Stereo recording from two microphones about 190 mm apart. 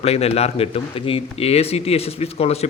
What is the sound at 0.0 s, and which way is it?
Speech, 30° left (ahead or behind).